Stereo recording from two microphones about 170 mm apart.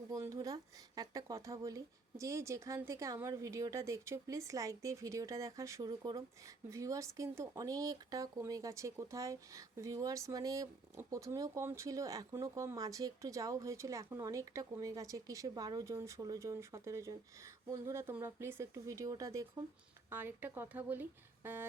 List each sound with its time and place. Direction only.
0.1 s speech: 20° right (ahead or behind)